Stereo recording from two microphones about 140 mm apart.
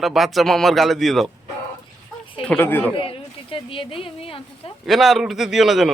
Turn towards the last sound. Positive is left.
turn(degrees=0)  # may be behind; listen again after turning